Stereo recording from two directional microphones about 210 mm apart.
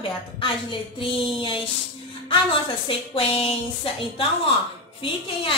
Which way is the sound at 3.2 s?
25° left (ahead or behind).